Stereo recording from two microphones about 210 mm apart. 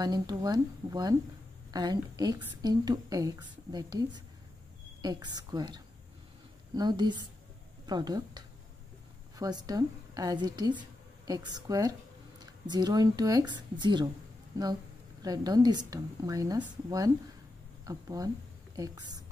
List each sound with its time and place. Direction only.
0.0 s a woman's voice: 20° right (ahead or behind)
15.2 s a woman's voice: 20° right (ahead or behind)